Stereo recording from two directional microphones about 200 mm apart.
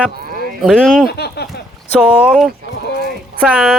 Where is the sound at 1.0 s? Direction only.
55° left (ahead or behind).